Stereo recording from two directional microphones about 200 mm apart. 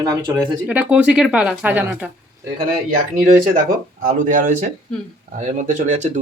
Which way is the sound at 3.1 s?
40° right (ahead or behind).